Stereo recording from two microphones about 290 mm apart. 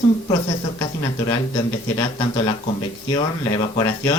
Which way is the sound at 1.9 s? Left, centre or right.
Centre.